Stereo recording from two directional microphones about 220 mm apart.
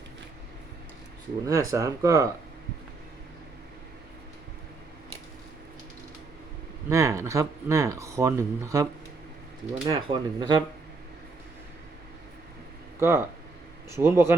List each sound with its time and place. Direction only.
1.5 s speech: 15° right (ahead or behind)
6.8 s speech: 15° right (ahead or behind)
13.0 s speech: 10° right (ahead or behind)